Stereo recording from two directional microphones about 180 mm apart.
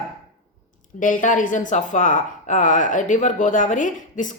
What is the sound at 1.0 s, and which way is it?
A woman's voice, 45° left (ahead or behind).